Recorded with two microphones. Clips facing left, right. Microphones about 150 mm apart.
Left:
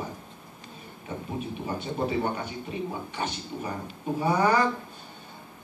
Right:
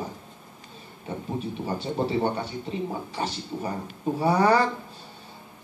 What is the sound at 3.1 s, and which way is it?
Speech, 35° right (ahead or behind).